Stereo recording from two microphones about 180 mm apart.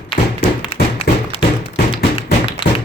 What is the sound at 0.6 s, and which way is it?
Tap, 30° left (ahead or behind).